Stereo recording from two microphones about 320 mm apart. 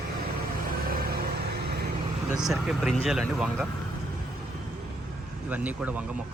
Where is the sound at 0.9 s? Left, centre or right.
Right.